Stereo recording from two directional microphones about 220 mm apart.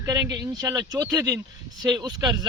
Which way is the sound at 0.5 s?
15° right (ahead or behind).